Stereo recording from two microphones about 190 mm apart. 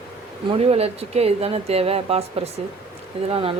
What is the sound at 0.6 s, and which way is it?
Speech, 30° right (ahead or behind).